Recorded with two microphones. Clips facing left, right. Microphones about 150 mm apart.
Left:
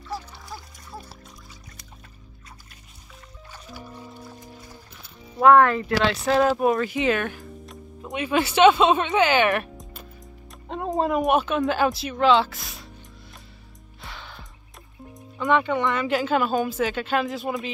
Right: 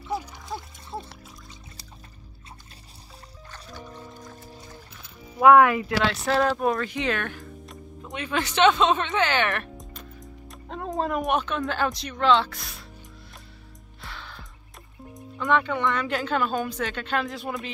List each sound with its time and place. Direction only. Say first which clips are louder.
0.1 s a sound: right 4 dB; 20° right (ahead or behind)
3.5 s music: left 1 dB; 10° left (ahead or behind)
5.4 s speech: even; 10° right (ahead or behind)
5.9 s speech: left 4 dB; centre (ahead or behind)
9.8 s music: right 1 dB; centre (ahead or behind)
11.0 s speech: left 4 dB; 5° left (ahead or behind)
14.0 s music: left 1 dB; centre (ahead or behind)
15.1 s speech: left 2 dB; centre (ahead or behind)